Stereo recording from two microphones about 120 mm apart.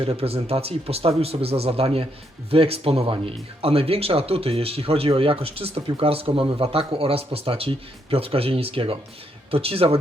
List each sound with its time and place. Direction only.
0.0 s speech: 50° right (ahead or behind)